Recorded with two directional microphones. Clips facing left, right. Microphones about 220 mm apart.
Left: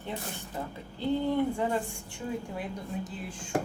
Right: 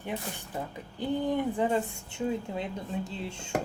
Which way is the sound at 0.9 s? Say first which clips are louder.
Left 1 dB; 15° right (ahead or behind).